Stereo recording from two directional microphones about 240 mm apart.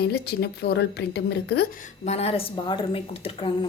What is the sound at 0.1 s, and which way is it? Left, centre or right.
A woman's voice, left.